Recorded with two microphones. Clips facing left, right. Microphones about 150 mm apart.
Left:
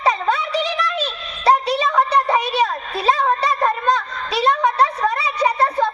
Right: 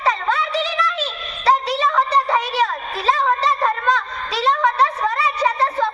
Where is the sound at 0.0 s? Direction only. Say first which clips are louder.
Left 1 dB; 15° left (ahead or behind).